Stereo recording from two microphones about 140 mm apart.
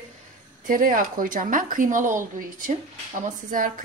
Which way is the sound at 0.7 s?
80° right.